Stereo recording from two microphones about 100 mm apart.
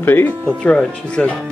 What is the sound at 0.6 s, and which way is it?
Speech, 10° left (ahead or behind).